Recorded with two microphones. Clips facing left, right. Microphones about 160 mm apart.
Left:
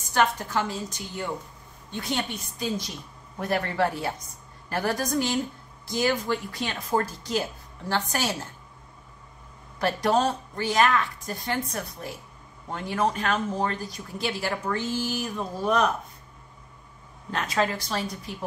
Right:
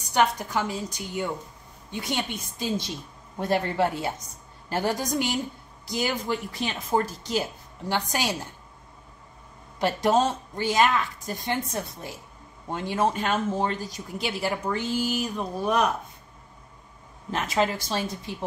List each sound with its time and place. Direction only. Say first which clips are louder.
0.1 s a woman's voice: right 1 dB; 15° right (ahead or behind)
3.3 s a woman's voice: right 1 dB; 25° right (ahead or behind)
9.8 s speech: right 1 dB; 20° right (ahead or behind)
15.6 s speech: left 1 dB; 5° right (ahead or behind)
17.3 s speech: right 1 dB; 25° right (ahead or behind)